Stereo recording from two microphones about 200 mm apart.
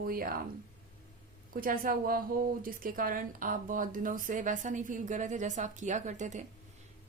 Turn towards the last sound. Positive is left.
turn(degrees=-35)  # may be behind; listen again after turning